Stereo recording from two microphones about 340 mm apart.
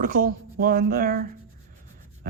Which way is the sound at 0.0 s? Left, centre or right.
Right.